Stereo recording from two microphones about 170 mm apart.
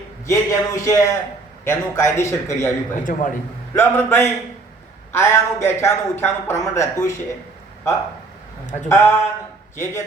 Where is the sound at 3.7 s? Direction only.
15° left (ahead or behind).